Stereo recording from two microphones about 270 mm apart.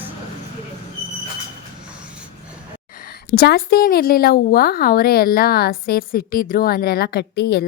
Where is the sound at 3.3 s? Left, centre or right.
Left.